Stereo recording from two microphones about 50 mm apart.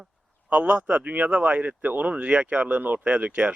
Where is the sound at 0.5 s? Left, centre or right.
Right.